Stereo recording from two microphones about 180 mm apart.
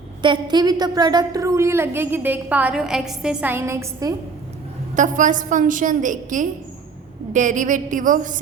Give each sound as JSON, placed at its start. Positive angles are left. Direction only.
{"t": 0.2, "sound": "a woman's voice", "side_deg": -25}
{"t": 4.9, "sound": "a woman's voice", "side_deg": -45}